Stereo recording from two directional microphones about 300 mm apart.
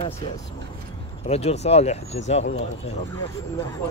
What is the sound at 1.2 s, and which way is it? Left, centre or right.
A man's voice, left.